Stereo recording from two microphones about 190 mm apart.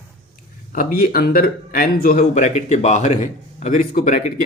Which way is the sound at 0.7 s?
50° left (ahead or behind).